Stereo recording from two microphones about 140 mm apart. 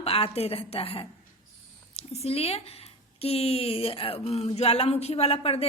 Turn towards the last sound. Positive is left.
turn(degrees=45)  # may be behind; listen again after turning